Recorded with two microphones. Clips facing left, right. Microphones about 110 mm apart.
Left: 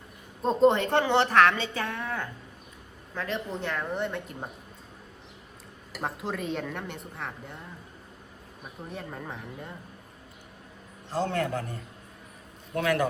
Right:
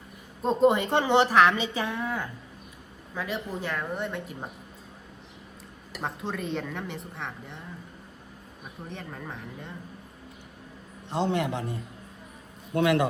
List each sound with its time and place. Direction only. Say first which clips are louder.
0.4 s a woman's voice: even; 5° right (ahead or behind)
5.9 s a woman's voice: even; centre (ahead or behind)
8.9 s a woman's voice: left 1 dB; 5° left (ahead or behind)
11.1 s a woman's voice: right 1 dB; 20° right (ahead or behind)